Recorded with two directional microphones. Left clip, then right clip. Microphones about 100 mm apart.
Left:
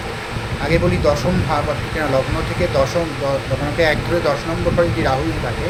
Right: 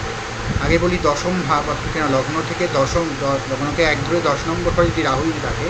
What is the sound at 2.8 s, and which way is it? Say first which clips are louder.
Speech: left 1 dB; 20° right (ahead or behind).